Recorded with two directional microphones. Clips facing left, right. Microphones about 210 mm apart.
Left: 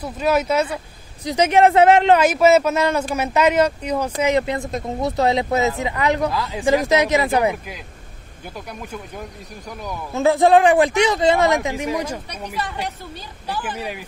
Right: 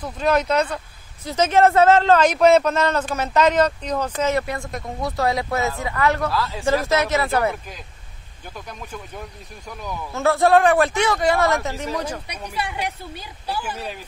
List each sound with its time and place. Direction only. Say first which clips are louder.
0.0 s speech: left 1 dB; 5° left (ahead or behind)
10.1 s speech: left 2 dB; 15° left (ahead or behind)
12.5 s a woman's voice: right 1 dB; 10° right (ahead or behind)
13.7 s speech: left 3 dB; 10° left (ahead or behind)